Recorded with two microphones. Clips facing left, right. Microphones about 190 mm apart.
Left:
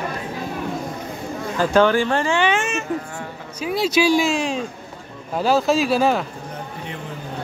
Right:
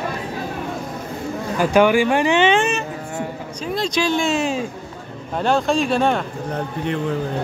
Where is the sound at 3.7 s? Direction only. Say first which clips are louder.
Left 3 dB; 5° left (ahead or behind).